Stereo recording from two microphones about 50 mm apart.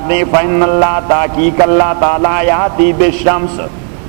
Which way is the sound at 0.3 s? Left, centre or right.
Left.